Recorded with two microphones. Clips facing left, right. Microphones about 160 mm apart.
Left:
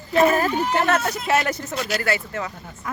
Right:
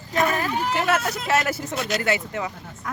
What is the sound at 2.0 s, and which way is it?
Speech, 20° right (ahead or behind).